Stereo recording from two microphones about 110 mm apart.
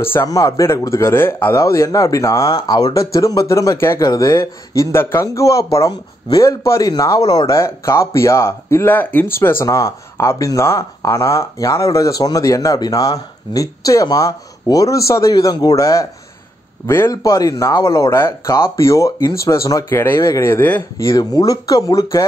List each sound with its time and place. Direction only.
0.0 s a man's voice: 20° left (ahead or behind)
21.0 s speech: 30° left (ahead or behind)